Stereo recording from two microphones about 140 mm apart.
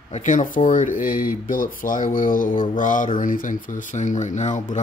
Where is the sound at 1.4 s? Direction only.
75° left (ahead or behind).